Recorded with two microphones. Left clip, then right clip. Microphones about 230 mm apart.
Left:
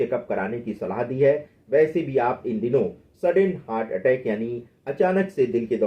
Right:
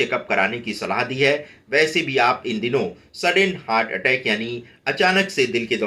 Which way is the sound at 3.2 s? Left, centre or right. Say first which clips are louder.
Right 2 dB; right.